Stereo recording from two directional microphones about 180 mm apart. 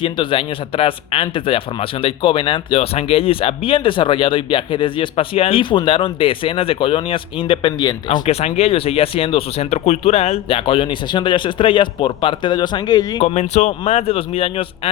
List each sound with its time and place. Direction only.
0.0 s speech: 30° left (ahead or behind)
13.2 s speech: 40° left (ahead or behind)